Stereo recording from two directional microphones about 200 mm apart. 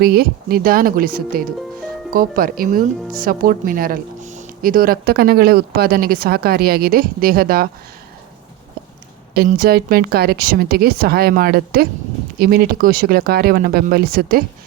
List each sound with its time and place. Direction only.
0.0 s speech: 50° right (ahead or behind)
9.3 s speech: 50° right (ahead or behind)